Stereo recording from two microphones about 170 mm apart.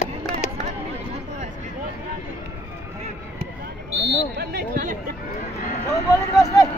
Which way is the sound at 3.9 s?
75° right (ahead or behind).